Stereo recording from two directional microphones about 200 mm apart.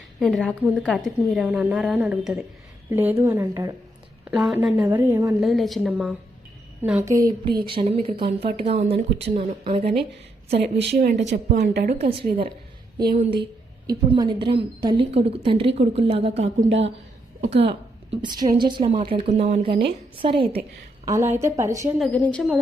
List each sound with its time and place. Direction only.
0.2 s a woman's voice: centre (ahead or behind); by 3.8 s 15° right (ahead or behind)
4.3 s a woman's voice: 5° right (ahead or behind)
5.4 s a woman's voice: centre (ahead or behind)
7.1 s a woman's voice: 20° right (ahead or behind)
10.8 s speech: 55° right (ahead or behind)
11.9 s a woman's voice: 30° right (ahead or behind)
13.8 s a woman's voice: 20° right (ahead or behind)
16.6 s a woman's voice: 65° right (ahead or behind)
17.6 s a woman's voice: 30° right (ahead or behind)
21.0 s a woman's voice: 15° right (ahead or behind)
21.9 s a woman's voice: 5° left (ahead or behind)